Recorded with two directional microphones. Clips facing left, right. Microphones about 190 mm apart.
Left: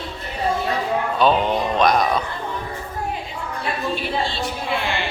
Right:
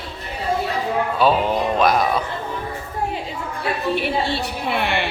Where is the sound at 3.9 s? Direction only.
65° right (ahead or behind).